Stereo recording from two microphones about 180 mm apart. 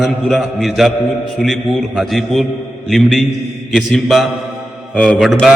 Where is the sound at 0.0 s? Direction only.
5° left (ahead or behind).